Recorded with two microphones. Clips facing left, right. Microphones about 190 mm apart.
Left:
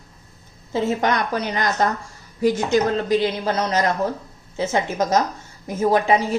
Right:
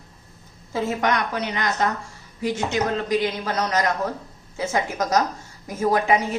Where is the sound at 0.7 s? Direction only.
30° left (ahead or behind).